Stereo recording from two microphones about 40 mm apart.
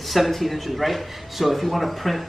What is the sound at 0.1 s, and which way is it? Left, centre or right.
Speech, centre.